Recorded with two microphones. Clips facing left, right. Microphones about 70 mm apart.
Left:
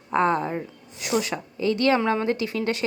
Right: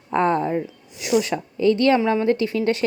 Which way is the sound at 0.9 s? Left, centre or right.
Left.